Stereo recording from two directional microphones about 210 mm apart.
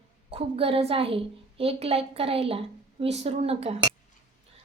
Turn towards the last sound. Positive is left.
turn(degrees=-30)  # may be behind; listen again after turning